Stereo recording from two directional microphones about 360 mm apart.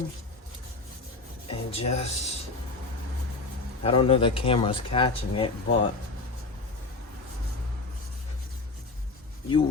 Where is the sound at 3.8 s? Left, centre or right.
Centre.